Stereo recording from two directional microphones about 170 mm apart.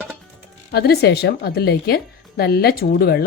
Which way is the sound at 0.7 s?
70° left (ahead or behind).